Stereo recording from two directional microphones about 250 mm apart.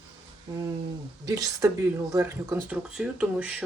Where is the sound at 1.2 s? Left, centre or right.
Centre.